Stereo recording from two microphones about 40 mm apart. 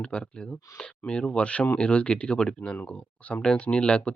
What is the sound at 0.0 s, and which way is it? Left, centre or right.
Speech, left.